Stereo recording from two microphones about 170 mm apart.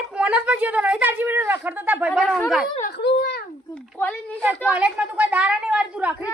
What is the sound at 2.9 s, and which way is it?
Speech, 80° left.